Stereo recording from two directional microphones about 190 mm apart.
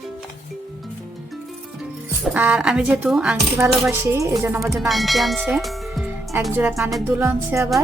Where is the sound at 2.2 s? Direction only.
5° right (ahead or behind).